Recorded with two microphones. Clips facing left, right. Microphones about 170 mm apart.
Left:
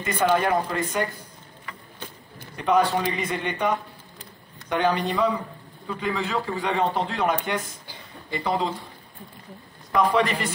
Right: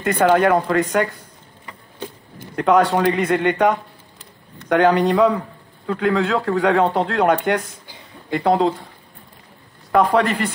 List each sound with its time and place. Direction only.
0.0 s a man's voice: 65° right (ahead or behind)
2.5 s a man's voice: 75° right (ahead or behind)
9.9 s speech: 60° right (ahead or behind)